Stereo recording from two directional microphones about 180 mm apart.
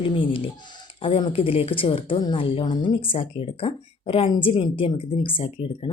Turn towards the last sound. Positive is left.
turn(degrees=30)  # may be behind; listen again after turning